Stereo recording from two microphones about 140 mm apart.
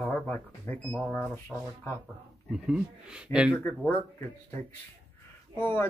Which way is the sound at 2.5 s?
5° right (ahead or behind).